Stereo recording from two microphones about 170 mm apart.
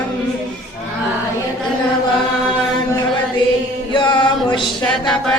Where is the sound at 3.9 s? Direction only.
25° left (ahead or behind).